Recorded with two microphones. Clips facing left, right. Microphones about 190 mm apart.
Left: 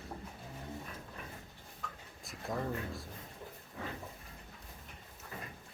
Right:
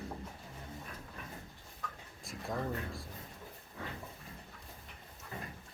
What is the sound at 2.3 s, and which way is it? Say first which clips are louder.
Speech: even; centre (ahead or behind).